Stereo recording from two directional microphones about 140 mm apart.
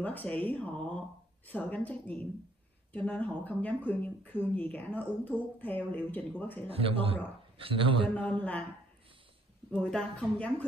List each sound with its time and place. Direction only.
0.0 s speech: 10° left (ahead or behind)
6.7 s a man's voice: 40° right (ahead or behind)
8.1 s speech: 10° left (ahead or behind)
9.8 s speech: 5° left (ahead or behind)